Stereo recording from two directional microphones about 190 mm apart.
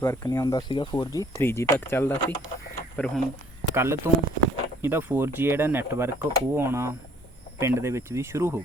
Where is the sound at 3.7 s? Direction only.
15° right (ahead or behind).